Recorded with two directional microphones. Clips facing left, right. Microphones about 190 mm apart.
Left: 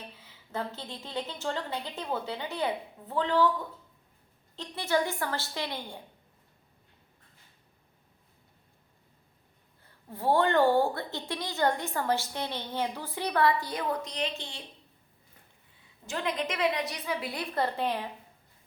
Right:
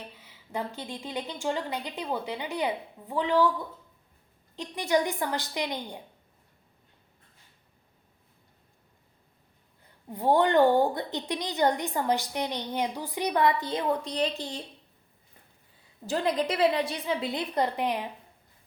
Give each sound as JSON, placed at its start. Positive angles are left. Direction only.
{"t": 0.5, "sound": "a woman's voice", "side_deg": -15}
{"t": 4.5, "sound": "a woman's voice", "side_deg": -15}
{"t": 9.8, "sound": "a woman's voice", "side_deg": -15}
{"t": 16.0, "sound": "a woman's voice", "side_deg": -35}